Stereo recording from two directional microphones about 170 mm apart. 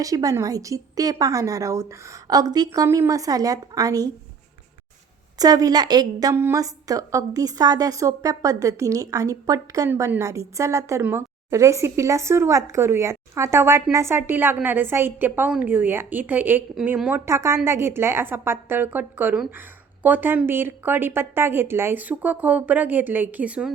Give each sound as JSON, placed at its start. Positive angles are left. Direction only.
{"t": 0.0, "sound": "a woman's voice", "side_deg": -20}
{"t": 5.4, "sound": "a woman's voice", "side_deg": -20}